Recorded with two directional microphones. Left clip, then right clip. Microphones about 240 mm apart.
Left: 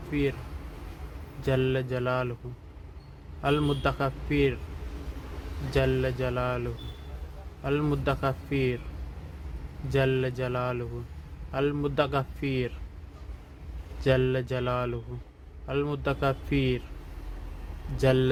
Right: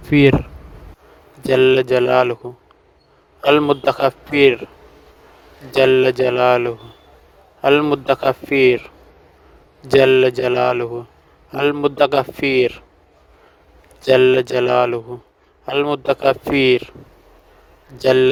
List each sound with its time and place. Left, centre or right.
0.1 s a man's voice: right
1.5 s a man's voice: right
3.4 s a man's voice: right
5.7 s a man's voice: right
9.9 s a man's voice: right
14.1 s a man's voice: right
18.0 s a man's voice: right